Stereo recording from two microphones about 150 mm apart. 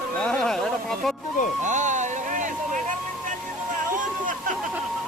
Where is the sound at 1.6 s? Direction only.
55° right (ahead or behind).